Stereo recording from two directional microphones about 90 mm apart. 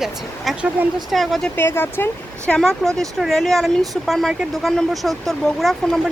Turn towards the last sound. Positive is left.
turn(degrees=0)  # may be behind; listen again after turning